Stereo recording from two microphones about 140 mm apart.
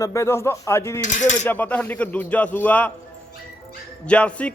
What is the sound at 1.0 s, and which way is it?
Cutlery, 60° left (ahead or behind).